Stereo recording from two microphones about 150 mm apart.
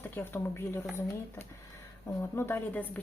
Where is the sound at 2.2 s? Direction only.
15° left (ahead or behind).